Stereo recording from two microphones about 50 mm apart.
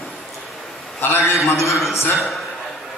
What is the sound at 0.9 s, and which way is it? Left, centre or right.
Speech, left.